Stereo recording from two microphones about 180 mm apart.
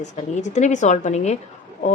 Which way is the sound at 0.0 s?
40° left (ahead or behind).